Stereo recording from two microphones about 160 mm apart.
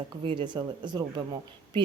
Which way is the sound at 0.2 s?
30° right (ahead or behind).